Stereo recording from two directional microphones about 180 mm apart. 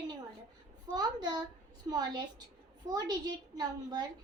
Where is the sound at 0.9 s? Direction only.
25° right (ahead or behind).